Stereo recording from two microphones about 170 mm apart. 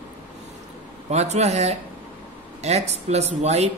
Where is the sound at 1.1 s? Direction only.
40° right (ahead or behind).